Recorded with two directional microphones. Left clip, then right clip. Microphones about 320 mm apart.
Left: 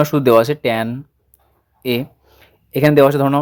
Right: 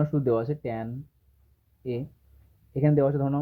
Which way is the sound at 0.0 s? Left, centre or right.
Left.